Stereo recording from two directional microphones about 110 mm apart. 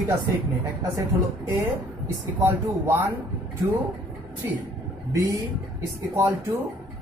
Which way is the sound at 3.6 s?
25° right (ahead or behind).